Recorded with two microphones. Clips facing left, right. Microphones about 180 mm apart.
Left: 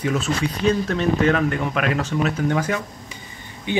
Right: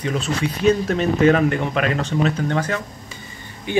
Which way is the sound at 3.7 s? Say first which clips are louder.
Right 2 dB; 20° left (ahead or behind).